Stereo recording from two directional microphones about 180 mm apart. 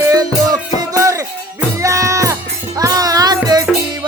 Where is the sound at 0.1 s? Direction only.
20° right (ahead or behind).